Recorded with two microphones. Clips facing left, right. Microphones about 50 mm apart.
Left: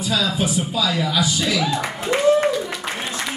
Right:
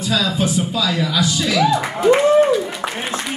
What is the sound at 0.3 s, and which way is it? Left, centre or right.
Speech, centre.